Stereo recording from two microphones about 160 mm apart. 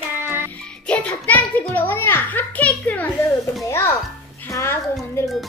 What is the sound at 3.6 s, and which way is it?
A child's voice, 15° left (ahead or behind).